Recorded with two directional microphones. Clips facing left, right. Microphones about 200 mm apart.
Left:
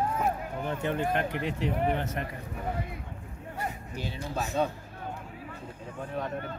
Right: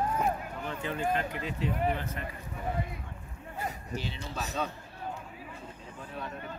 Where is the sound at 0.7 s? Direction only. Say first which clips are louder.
Left 2 dB; 50° left (ahead or behind); by 2.2 s 70° left (ahead or behind).